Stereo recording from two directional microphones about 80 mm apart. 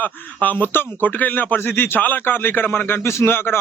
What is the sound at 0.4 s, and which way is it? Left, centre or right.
Speech, left.